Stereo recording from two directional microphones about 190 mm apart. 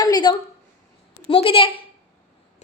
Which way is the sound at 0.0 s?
25° left (ahead or behind).